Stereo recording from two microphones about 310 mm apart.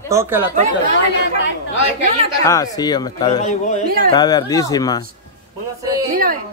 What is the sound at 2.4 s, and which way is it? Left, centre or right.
Speech, centre.